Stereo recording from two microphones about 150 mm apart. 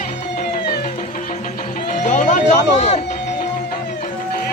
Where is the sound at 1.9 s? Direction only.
50° left (ahead or behind).